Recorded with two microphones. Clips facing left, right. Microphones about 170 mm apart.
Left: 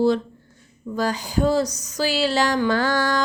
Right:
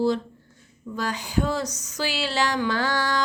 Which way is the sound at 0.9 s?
35° left (ahead or behind).